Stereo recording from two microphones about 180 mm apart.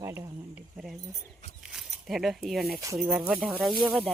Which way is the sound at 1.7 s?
Centre (ahead or behind).